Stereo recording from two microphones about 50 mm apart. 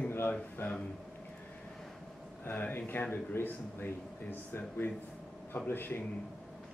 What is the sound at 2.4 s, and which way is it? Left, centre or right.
Speech, left.